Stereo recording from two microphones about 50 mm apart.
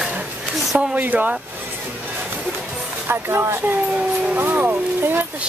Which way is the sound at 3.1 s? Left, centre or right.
Right.